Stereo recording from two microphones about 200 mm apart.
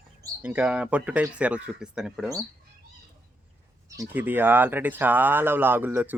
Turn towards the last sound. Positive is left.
turn(degrees=-10)  # may be behind; listen again after turning